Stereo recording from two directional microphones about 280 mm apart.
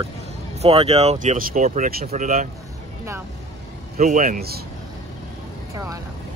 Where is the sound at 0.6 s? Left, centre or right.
Right.